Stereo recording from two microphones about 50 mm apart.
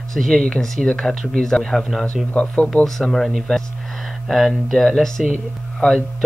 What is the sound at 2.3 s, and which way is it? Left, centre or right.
Speech, left.